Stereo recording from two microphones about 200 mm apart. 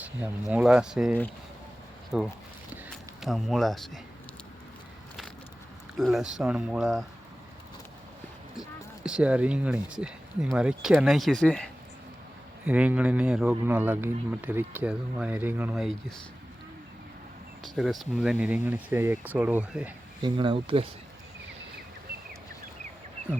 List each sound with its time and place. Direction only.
0.5 s speech: 5° right (ahead or behind)
6.0 s speech: centre (ahead or behind)
9.0 s speech: 5° right (ahead or behind)
12.6 s speech: 5° right (ahead or behind)
17.6 s speech: centre (ahead or behind)
20.2 s speech: 25° right (ahead or behind)